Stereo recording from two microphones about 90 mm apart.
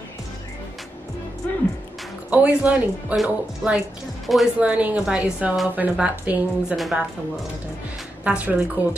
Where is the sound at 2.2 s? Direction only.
15° right (ahead or behind).